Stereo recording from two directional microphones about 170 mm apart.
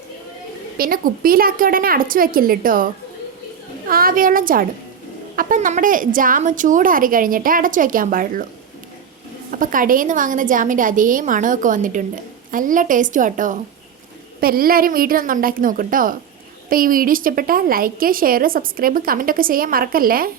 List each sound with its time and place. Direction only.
0.8 s a woman's voice: 55° right (ahead or behind)
9.5 s a woman's voice: 55° right (ahead or behind)
14.4 s a woman's voice: 60° right (ahead or behind)